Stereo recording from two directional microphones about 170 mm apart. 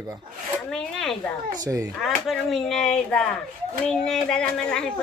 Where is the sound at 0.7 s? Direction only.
Centre (ahead or behind).